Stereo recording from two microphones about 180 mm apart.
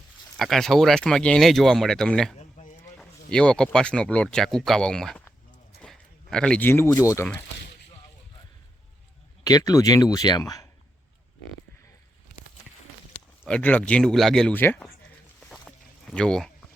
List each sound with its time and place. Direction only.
0.3 s speech: centre (ahead or behind)
2.4 s a sound: 40° left (ahead or behind)
3.0 s speech: 5° left (ahead or behind)
9.4 s speech: 20° left (ahead or behind)
13.1 s a sound: 35° left (ahead or behind)
13.5 s speech: 10° left (ahead or behind)
15.4 s walk: 5° left (ahead or behind)